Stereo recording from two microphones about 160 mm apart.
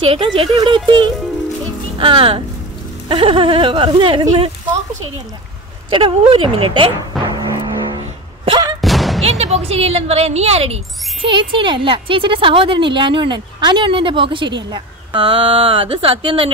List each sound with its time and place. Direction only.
0.0 s a woman's voice: 35° right (ahead or behind)
5.9 s a woman's voice: 30° right (ahead or behind)
7.3 s vehicle: 25° right (ahead or behind)
8.5 s a sound: 25° right (ahead or behind)
8.8 s a sound: centre (ahead or behind)
9.2 s a woman's voice: 40° right (ahead or behind)